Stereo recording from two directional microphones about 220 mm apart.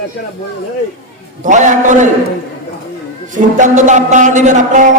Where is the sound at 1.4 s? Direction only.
35° right (ahead or behind).